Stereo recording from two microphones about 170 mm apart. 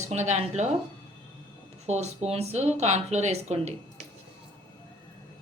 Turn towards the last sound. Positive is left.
turn(degrees=-40)  # may be behind; listen again after turning